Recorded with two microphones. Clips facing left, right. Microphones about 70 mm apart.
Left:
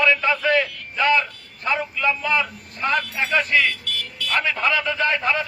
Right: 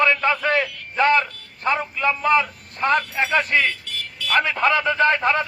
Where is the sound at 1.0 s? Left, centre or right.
Right.